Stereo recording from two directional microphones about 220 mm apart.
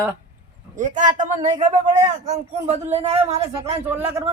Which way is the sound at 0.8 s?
35° right (ahead or behind).